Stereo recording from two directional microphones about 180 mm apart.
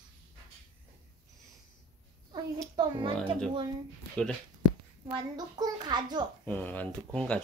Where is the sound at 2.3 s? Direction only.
25° right (ahead or behind).